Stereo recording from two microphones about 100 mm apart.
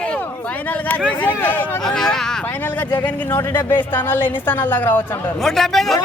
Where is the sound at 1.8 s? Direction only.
5° left (ahead or behind).